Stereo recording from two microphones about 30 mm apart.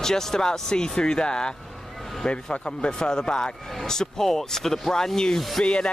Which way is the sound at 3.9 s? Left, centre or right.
Centre.